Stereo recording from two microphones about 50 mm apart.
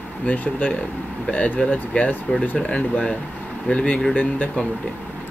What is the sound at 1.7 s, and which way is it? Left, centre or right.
Speech, left.